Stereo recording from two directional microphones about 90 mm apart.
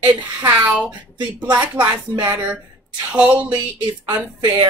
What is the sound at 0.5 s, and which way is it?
A woman's voice, 15° right (ahead or behind).